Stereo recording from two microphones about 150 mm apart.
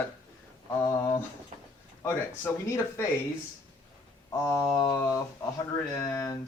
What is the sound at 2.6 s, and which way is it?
Speech, 20° left (ahead or behind).